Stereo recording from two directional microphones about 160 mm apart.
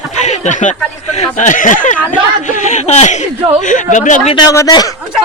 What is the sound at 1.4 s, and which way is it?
Speech, 55° left (ahead or behind).